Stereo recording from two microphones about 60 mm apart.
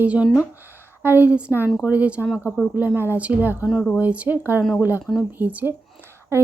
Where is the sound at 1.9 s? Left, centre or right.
Right.